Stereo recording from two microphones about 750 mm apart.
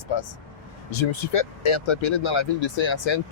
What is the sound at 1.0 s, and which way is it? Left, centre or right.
Speech, left.